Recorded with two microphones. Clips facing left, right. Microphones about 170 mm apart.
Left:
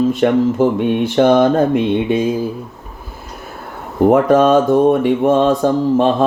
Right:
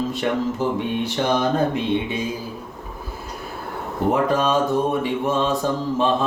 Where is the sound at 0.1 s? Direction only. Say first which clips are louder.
Left 9 dB; 50° left (ahead or behind).